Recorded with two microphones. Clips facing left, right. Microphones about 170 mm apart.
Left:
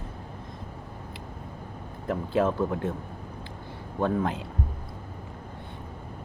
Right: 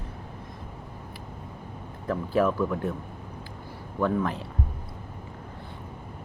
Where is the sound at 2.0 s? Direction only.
25° left (ahead or behind).